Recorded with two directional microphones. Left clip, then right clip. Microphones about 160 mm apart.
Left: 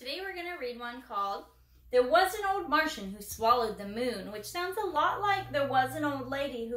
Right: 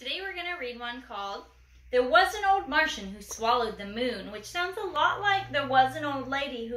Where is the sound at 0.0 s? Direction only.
10° left (ahead or behind).